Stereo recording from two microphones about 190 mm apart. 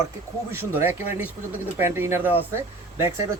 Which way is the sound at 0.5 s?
10° right (ahead or behind).